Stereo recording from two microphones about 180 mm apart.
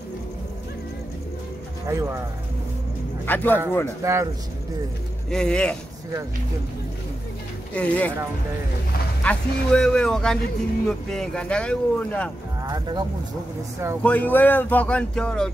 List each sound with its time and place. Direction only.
1.9 s a man's voice: 15° right (ahead or behind)
3.3 s speech: 10° left (ahead or behind)
4.0 s a man's voice: 15° right (ahead or behind)
5.3 s speech: 5° left (ahead or behind)
7.7 s speech: 5° left (ahead or behind)
9.2 s speech: 5° left (ahead or behind)
12.6 s speech: 25° right (ahead or behind)
14.0 s speech: 10° left (ahead or behind)